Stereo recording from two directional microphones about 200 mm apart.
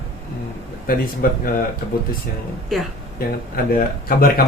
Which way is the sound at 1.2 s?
50° left (ahead or behind).